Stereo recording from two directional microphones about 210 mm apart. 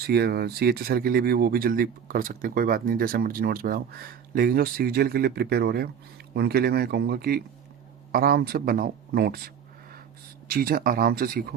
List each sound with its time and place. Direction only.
0.1 s speech: 50° right (ahead or behind)
10.5 s speech: 45° right (ahead or behind)